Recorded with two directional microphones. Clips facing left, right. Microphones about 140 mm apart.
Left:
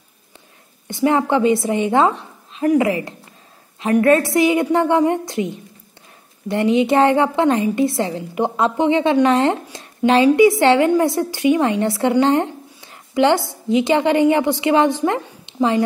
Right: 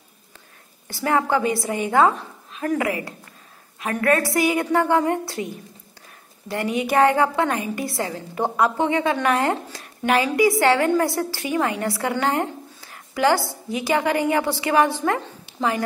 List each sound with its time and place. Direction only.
0.8 s a woman's voice: 20° left (ahead or behind)